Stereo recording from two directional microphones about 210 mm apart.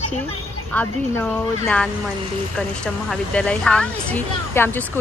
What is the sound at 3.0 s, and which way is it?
Speech, 5° left (ahead or behind).